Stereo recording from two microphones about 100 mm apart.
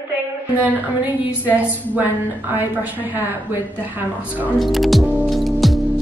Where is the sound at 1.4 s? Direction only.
20° right (ahead or behind).